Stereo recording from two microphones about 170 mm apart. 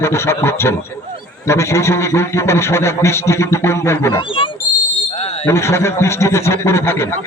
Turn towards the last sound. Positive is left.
turn(degrees=15)  # may be behind; listen again after turning